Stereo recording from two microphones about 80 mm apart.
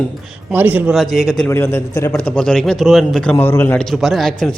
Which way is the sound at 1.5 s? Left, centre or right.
Left.